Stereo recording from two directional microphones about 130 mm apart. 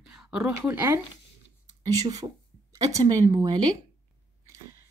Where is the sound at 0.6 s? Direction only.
15° right (ahead or behind).